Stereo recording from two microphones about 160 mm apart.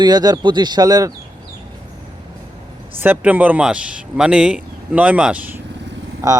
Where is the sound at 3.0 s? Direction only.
10° right (ahead or behind).